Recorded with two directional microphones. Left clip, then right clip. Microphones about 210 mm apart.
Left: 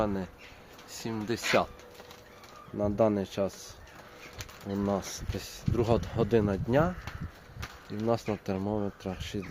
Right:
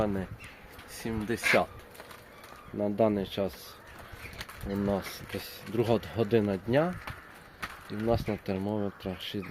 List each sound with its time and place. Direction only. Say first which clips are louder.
0.0 s speech: even; centre (ahead or behind)
2.7 s speech: even; centre (ahead or behind)
4.9 s speech: even; centre (ahead or behind)